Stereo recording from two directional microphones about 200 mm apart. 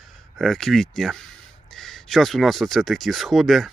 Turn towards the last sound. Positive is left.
turn(degrees=0)  # may be behind; listen again after turning